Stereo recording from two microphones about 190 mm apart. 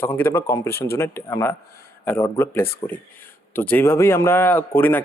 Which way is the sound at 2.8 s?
25° left (ahead or behind).